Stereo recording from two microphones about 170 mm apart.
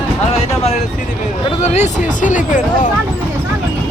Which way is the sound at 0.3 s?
35° left (ahead or behind).